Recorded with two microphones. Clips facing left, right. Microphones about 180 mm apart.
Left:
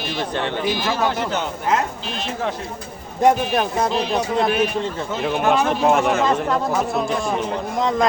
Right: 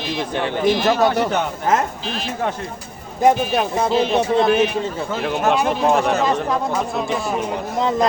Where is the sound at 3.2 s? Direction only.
5° right (ahead or behind).